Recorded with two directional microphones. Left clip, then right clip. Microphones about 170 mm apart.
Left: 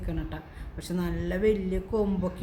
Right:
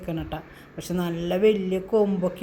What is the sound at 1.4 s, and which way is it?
Speech, 20° left (ahead or behind).